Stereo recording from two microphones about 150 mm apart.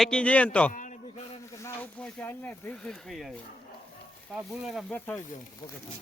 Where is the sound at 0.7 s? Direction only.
60° left (ahead or behind).